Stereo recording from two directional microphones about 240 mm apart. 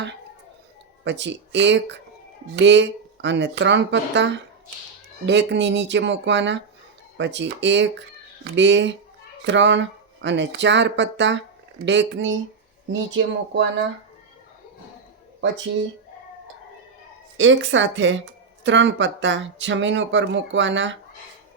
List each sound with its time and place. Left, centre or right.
1.0 s speech: right
17.3 s speech: right